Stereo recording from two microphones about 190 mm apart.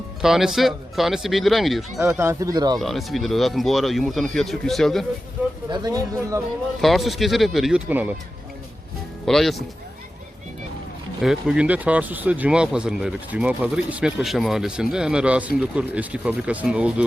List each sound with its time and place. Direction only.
0.2 s speech: 5° right (ahead or behind)
2.0 s speech: 15° right (ahead or behind)
2.7 s speech: centre (ahead or behind)
5.4 s vehicle: 10° right (ahead or behind)
5.7 s speech: 20° right (ahead or behind)
6.8 s speech: centre (ahead or behind)
9.2 s speech: centre (ahead or behind)
11.2 s speech: 5° right (ahead or behind)